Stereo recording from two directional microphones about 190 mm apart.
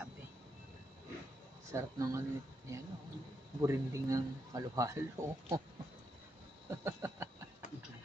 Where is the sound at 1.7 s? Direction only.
15° right (ahead or behind).